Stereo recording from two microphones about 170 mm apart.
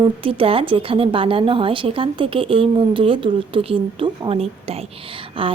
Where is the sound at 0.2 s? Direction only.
30° right (ahead or behind).